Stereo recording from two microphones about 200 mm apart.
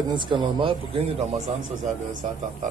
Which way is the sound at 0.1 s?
25° right (ahead or behind).